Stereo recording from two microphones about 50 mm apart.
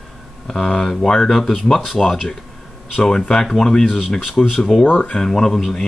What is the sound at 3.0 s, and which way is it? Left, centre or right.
Speech, centre.